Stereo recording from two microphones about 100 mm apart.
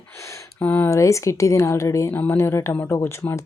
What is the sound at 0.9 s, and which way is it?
Speech, 30° left (ahead or behind).